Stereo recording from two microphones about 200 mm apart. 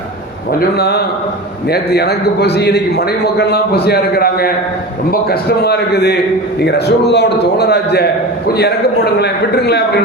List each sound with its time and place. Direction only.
0.8 s a man's voice: 55° left (ahead or behind)
9.1 s a man's voice: 55° left (ahead or behind)